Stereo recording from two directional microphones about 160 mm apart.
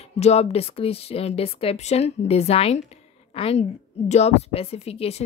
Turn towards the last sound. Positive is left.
turn(degrees=40)  # may be behind; listen again after turning